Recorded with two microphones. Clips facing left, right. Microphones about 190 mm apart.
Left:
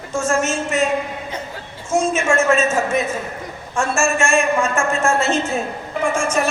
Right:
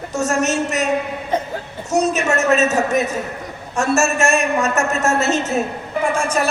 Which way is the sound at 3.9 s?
40° right (ahead or behind).